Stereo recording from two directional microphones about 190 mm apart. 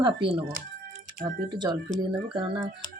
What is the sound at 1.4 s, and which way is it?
Speech, 25° right (ahead or behind).